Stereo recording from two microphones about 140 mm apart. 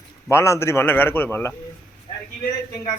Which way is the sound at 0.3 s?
20° left (ahead or behind).